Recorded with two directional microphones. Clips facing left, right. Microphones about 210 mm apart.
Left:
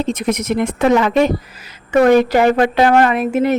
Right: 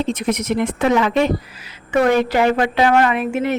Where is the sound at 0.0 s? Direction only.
45° left (ahead or behind).